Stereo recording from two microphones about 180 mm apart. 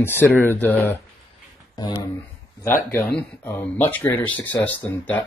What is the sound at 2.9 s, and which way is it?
Speech, 10° left (ahead or behind).